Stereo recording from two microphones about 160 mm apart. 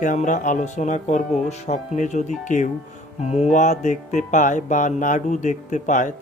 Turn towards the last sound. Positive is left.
turn(degrees=50)  # may be behind; listen again after turning